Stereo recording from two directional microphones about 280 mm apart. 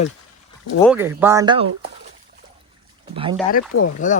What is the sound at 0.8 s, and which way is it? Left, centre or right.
Speech, centre.